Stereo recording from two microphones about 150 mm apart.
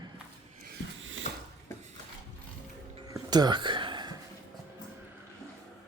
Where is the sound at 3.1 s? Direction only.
25° right (ahead or behind).